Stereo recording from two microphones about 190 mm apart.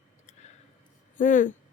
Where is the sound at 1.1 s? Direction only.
45° left (ahead or behind).